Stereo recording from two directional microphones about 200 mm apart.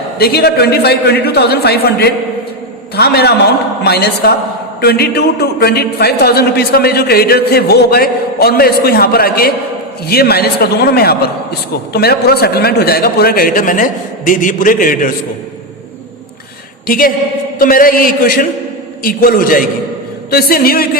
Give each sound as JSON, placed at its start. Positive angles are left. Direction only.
{"t": 0.2, "sound": "a man's voice", "side_deg": 50}
{"t": 16.8, "sound": "a woman's voice", "side_deg": 45}